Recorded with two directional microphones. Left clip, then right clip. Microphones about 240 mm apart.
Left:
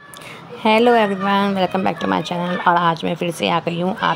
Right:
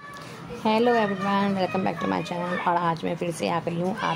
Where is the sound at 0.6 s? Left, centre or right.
Left.